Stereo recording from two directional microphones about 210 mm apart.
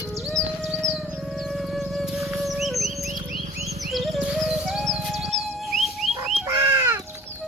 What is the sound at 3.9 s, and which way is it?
Music, centre (ahead or behind).